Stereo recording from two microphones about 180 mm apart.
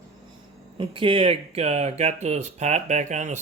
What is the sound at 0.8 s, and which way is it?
Speech, 30° right (ahead or behind).